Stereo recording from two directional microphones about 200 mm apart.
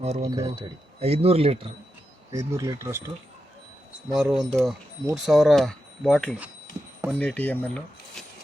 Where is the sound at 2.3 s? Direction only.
15° right (ahead or behind).